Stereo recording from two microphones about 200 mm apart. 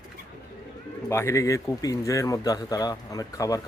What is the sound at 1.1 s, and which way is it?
Speech, 15° left (ahead or behind).